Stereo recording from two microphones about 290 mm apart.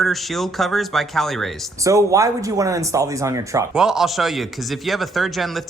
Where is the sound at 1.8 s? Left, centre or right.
Centre.